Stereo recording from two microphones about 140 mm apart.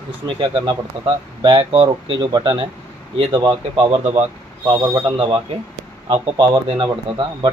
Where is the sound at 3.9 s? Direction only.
50° right (ahead or behind).